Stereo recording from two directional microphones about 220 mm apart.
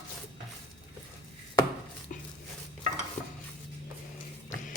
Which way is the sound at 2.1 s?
35° left (ahead or behind).